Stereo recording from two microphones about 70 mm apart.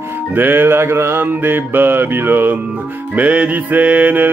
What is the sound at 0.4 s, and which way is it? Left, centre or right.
Mantra, right.